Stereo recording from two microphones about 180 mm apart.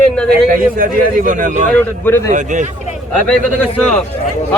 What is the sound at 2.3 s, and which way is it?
Speech, 45° right (ahead or behind).